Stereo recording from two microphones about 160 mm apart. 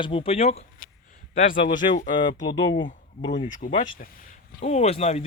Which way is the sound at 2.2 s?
25° left (ahead or behind).